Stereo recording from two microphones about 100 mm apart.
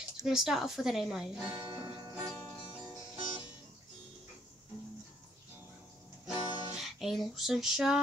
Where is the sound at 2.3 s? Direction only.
15° left (ahead or behind).